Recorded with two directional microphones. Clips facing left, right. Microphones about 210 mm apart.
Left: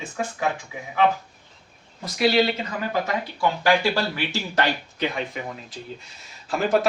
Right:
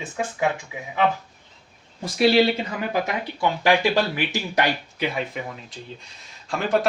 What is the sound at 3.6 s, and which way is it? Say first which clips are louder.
Speech: right 2 dB; 15° right (ahead or behind).